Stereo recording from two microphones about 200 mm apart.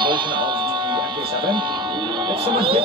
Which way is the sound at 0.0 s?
25° right (ahead or behind).